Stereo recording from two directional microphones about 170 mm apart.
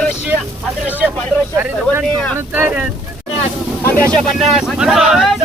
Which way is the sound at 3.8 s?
5° left (ahead or behind).